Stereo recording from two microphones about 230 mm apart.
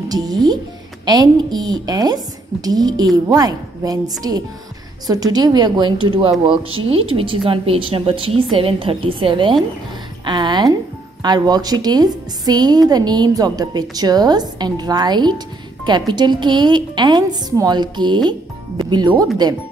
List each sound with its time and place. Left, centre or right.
0.1 s a woman's voice: centre